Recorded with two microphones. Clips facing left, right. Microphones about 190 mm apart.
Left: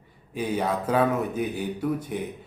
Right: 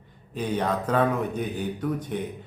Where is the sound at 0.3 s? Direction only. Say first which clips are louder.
Even; 10° left (ahead or behind).